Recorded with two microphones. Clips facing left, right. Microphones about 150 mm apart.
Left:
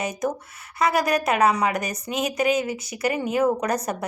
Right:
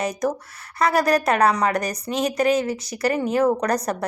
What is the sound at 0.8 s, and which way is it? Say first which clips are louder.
A woman's voice: right 2 dB; centre (ahead or behind).